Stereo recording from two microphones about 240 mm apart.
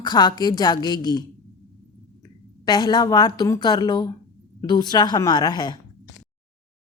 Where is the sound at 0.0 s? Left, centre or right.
Centre.